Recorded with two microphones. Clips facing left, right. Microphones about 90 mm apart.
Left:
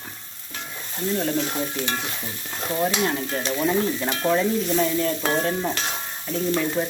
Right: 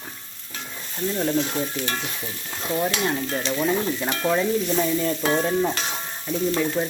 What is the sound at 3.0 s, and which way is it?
Stir, centre (ahead or behind).